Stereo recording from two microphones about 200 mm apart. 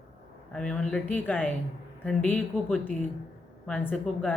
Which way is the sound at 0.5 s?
5° left (ahead or behind).